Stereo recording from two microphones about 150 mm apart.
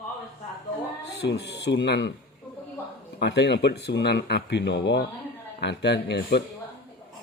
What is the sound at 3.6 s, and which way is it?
Speech, 90° left.